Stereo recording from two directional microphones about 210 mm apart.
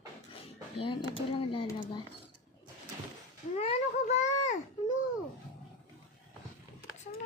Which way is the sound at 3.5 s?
35° left (ahead or behind).